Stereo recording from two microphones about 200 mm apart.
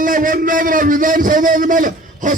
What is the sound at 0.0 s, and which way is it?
A man's voice, 40° right (ahead or behind).